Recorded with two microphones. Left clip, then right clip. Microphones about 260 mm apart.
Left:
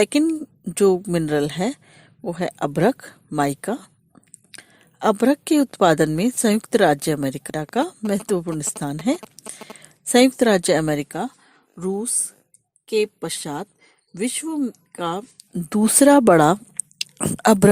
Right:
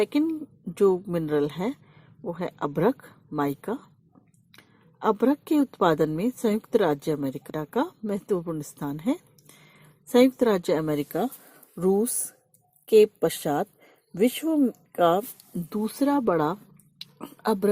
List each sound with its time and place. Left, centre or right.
0.0 s a woman's voice: left
11.8 s speech: centre; by 17.7 s left